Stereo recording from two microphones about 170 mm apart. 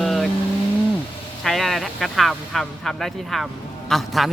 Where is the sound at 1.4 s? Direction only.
Centre (ahead or behind).